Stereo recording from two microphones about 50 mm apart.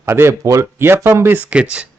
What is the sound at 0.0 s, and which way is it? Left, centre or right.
Speech, right.